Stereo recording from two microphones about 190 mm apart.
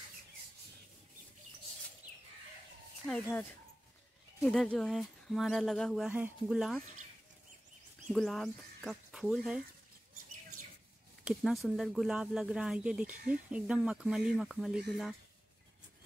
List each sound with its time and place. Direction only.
3.1 s speech: 5° left (ahead or behind)
8.1 s speech: centre (ahead or behind)
11.2 s speech: centre (ahead or behind)